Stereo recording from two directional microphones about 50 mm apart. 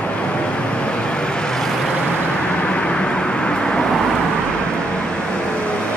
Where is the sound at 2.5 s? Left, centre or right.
Left.